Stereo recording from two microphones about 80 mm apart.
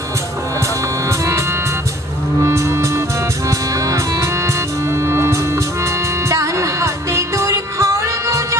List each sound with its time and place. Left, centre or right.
1.0 s music: right